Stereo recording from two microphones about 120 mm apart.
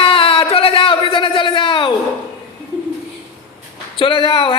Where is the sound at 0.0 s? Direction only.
45° left (ahead or behind).